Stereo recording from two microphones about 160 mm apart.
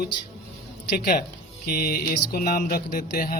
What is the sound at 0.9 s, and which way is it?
Speech, 65° left (ahead or behind).